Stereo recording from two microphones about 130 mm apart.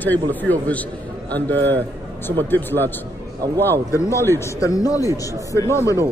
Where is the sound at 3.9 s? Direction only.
20° left (ahead or behind).